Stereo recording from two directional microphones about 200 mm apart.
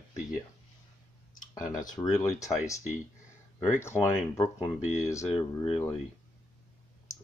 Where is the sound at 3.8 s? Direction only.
10° left (ahead or behind).